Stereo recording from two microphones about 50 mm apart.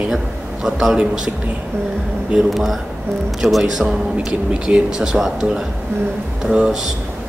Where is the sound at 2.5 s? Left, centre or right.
Centre.